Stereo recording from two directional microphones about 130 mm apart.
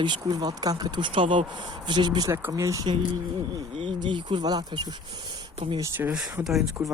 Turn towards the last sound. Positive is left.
turn(degrees=-5)  # may be behind; listen again after turning